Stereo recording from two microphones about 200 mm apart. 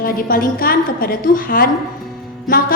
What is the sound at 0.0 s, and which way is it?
A woman's voice, 45° left (ahead or behind).